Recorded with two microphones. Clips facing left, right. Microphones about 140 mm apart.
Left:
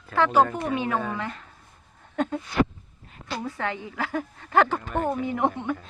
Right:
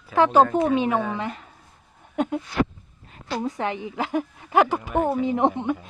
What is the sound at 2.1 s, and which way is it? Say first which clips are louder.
Speech: right 2 dB; 10° right (ahead or behind).